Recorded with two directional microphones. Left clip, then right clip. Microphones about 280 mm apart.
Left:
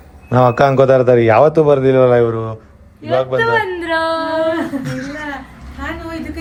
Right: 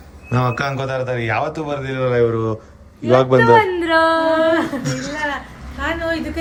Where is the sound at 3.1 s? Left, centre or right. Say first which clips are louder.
Right 2 dB; right.